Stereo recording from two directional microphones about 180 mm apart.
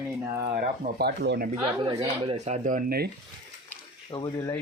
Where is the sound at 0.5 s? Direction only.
55° right (ahead or behind).